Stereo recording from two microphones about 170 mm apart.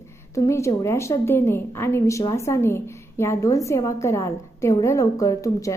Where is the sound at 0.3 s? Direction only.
15° left (ahead or behind).